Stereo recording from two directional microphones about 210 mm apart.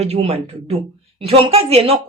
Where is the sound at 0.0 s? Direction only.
30° right (ahead or behind).